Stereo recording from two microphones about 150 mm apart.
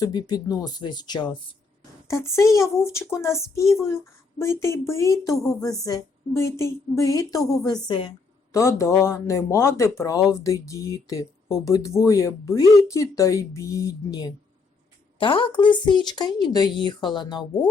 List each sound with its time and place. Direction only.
0.0 s speech: 25° left (ahead or behind)
2.0 s speech: 20° left (ahead or behind)
8.5 s speech: 20° left (ahead or behind)